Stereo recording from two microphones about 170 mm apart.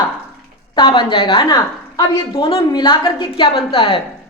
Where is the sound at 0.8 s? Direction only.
30° left (ahead or behind).